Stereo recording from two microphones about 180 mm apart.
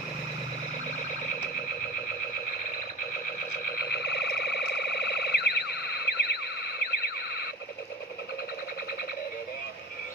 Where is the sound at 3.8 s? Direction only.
65° left (ahead or behind).